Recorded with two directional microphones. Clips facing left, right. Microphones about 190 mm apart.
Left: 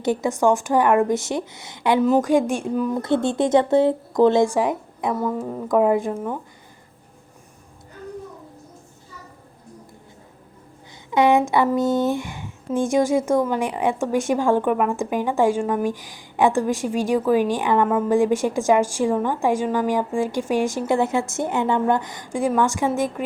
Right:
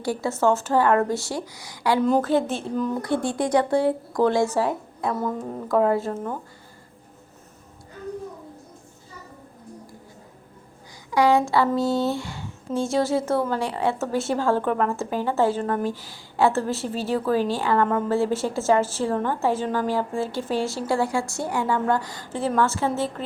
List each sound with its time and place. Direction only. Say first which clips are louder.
0.0 s speech: left 3 dB; 20° left (ahead or behind)
2.0 s speech: left 3 dB; 5° left (ahead or behind)
3.0 s speech: left 4 dB; 25° left (ahead or behind)
11.1 s speech: left 2 dB; 20° left (ahead or behind)